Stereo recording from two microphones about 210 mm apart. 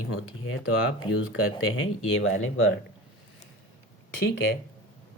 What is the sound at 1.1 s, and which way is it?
Speech, 70° left (ahead or behind).